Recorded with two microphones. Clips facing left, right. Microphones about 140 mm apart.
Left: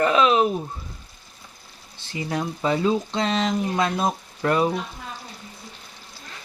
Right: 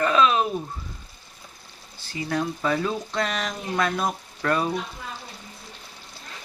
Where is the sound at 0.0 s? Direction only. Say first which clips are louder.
Left 2 dB; 25° left (ahead or behind).